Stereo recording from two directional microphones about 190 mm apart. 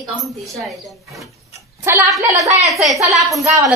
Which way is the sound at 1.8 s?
15° right (ahead or behind).